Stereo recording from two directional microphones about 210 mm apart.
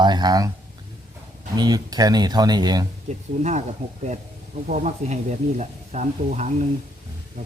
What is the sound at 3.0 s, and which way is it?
Speech, 35° right (ahead or behind).